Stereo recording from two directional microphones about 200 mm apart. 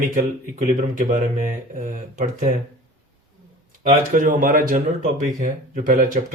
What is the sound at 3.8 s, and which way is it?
Speech, 40° right (ahead or behind).